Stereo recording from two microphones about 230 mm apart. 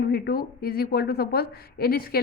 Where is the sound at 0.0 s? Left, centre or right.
Left.